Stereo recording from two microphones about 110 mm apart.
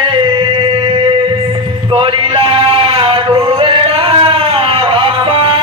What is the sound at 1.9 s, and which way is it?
Male singing, 55° right (ahead or behind).